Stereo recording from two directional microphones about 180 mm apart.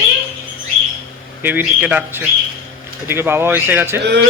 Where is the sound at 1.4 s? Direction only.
10° right (ahead or behind).